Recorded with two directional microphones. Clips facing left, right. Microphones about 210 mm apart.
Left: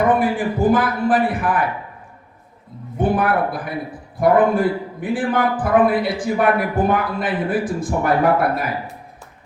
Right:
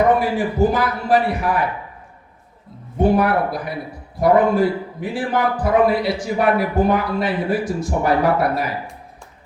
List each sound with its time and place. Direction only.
0.2 s a man's voice: 50° left (ahead or behind)
3.0 s a man's voice: 50° left (ahead or behind)